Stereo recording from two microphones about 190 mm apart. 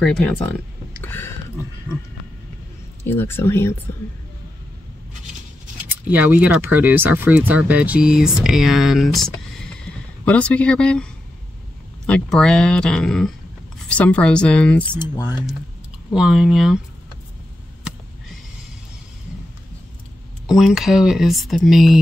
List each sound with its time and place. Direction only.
0.0 s speech: 5° left (ahead or behind)
3.0 s speech: 10° left (ahead or behind)
5.9 s speech: 10° right (ahead or behind)
12.1 s speech: 5° left (ahead or behind)
15.0 s speech: 20° left (ahead or behind)
16.1 s speech: 5° right (ahead or behind)
20.4 s speech: centre (ahead or behind)